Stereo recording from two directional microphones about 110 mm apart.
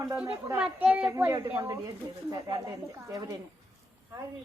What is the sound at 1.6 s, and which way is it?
Speech, 30° right (ahead or behind).